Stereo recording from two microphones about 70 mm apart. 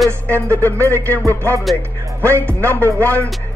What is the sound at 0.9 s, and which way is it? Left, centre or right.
Music, right.